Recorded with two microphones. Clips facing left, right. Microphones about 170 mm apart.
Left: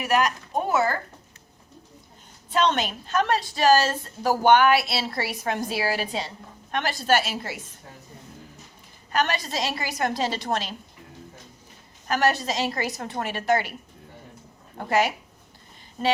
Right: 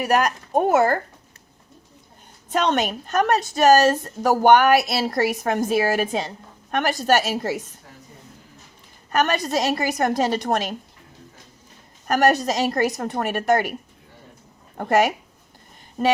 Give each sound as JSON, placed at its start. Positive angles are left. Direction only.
{"t": 0.0, "sound": "a woman's voice", "side_deg": -45}
{"t": 2.5, "sound": "a woman's voice", "side_deg": -45}
{"t": 9.1, "sound": "a woman's voice", "side_deg": -45}
{"t": 12.0, "sound": "a woman's voice", "side_deg": -45}
{"t": 14.8, "sound": "a woman's voice", "side_deg": -50}